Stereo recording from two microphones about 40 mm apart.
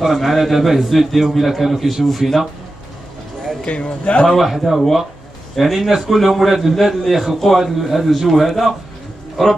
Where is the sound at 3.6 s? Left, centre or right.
Left.